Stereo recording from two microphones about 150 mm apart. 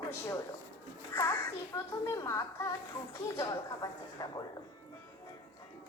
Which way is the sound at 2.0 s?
20° left (ahead or behind).